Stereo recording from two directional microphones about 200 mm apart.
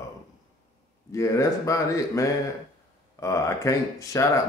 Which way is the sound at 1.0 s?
15° left (ahead or behind).